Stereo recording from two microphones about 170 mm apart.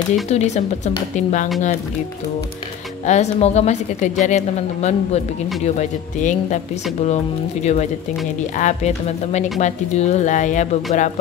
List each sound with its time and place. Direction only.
0.3 s a woman's voice: 40° left (ahead or behind)
3.1 s a woman's voice: 40° left (ahead or behind)
7.6 s a woman's voice: 40° left (ahead or behind)